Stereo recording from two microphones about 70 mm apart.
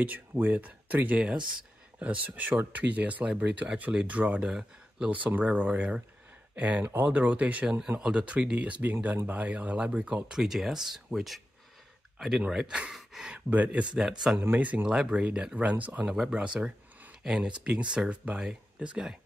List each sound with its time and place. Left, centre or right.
0.0 s speech: right
4.5 s speech: centre
5.1 s speech: right
10.4 s speech: centre
13.5 s speech: right
13.9 s speech: centre
14.6 s speech: right
16.1 s speech: centre